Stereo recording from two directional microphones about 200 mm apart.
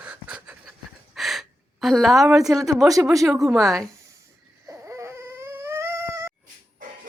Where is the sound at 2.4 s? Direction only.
15° right (ahead or behind).